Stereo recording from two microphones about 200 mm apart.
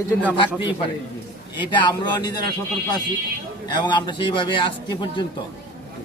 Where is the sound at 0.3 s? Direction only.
25° left (ahead or behind).